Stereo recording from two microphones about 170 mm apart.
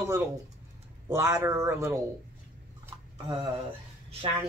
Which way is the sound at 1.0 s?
15° right (ahead or behind).